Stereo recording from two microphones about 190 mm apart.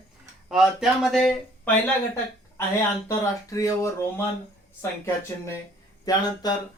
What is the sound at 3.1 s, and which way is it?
Speech, 15° left (ahead or behind).